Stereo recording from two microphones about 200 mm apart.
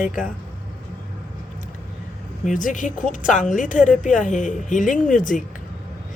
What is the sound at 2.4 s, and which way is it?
A woman's voice, 40° left (ahead or behind).